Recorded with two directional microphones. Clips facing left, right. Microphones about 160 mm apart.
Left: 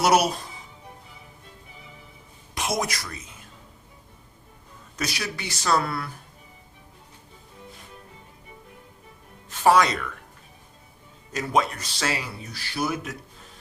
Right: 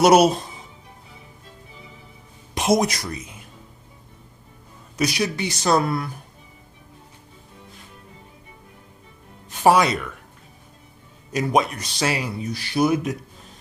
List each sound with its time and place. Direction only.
0.0 s speech: 20° right (ahead or behind)
2.6 s speech: 20° right (ahead or behind)
4.9 s speech: 15° right (ahead or behind)
9.5 s speech: 10° right (ahead or behind)
11.3 s speech: 15° right (ahead or behind)